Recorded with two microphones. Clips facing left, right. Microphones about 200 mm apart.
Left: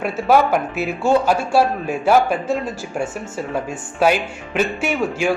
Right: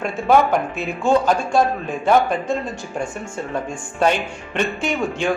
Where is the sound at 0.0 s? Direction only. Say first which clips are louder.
Even; 5° left (ahead or behind).